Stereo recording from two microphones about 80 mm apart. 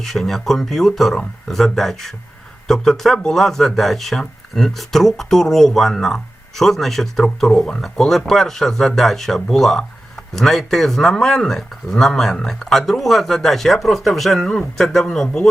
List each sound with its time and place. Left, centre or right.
0.0 s speech: centre